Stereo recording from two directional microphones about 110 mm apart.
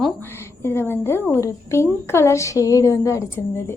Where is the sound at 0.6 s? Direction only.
20° left (ahead or behind).